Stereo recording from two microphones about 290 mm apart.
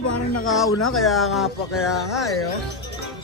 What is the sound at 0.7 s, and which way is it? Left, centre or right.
Speech, left.